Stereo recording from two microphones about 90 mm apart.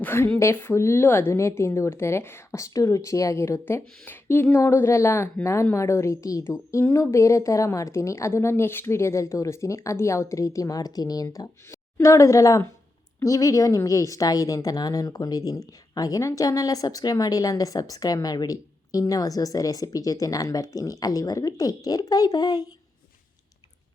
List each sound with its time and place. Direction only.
0.0 s a woman's voice: 25° left (ahead or behind); by 22.6 s 45° left (ahead or behind)